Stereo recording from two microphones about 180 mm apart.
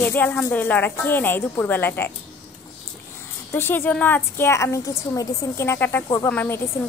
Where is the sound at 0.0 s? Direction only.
10° left (ahead or behind).